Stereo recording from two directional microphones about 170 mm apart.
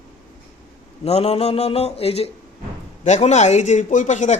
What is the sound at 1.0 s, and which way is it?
Speech, 35° left (ahead or behind).